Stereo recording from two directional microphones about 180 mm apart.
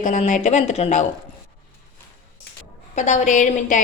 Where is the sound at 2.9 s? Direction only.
40° left (ahead or behind).